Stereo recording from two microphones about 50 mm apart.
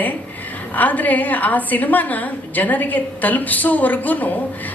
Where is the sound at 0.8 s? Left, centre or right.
Left.